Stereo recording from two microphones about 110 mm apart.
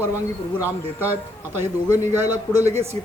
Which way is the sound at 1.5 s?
20° right (ahead or behind).